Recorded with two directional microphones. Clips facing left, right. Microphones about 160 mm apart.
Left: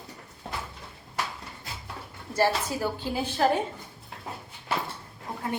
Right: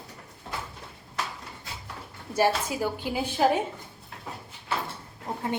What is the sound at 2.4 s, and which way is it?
A woman's voice, 15° right (ahead or behind).